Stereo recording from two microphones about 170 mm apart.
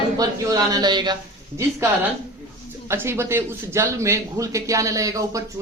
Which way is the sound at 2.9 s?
15° right (ahead or behind).